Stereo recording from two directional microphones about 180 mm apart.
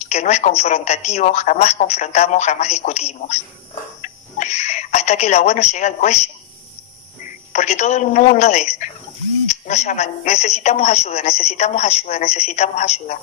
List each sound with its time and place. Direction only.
0.0 s a woman's voice: 40° left (ahead or behind)